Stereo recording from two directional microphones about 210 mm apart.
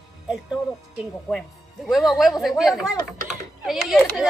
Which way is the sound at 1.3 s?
Centre (ahead or behind).